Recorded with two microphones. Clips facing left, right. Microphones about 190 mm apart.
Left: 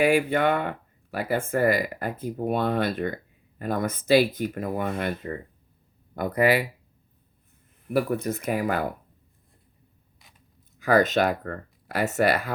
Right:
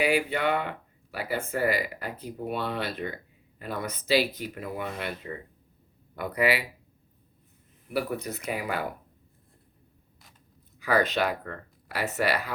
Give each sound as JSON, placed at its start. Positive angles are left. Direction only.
{"t": 0.0, "sound": "speech", "side_deg": 50}
{"t": 7.9, "sound": "speech", "side_deg": 50}
{"t": 10.8, "sound": "speech", "side_deg": 45}